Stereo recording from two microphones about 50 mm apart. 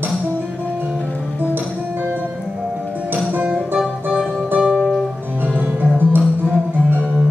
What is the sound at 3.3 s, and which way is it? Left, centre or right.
Music, right.